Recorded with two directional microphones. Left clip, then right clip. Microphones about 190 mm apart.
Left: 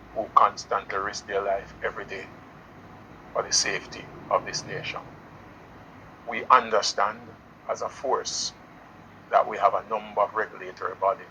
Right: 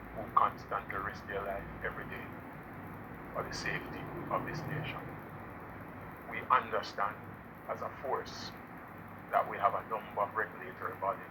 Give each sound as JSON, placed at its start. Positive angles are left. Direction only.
{"t": 0.3, "sound": "speech", "side_deg": 55}
{"t": 3.3, "sound": "speech", "side_deg": 50}
{"t": 6.3, "sound": "speech", "side_deg": 55}